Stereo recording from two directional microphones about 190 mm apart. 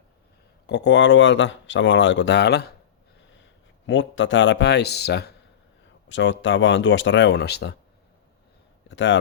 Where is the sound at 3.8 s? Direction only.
80° left; by 5.3 s 60° left (ahead or behind).